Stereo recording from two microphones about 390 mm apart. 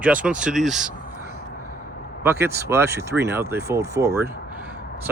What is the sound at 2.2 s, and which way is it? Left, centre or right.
Speech, centre.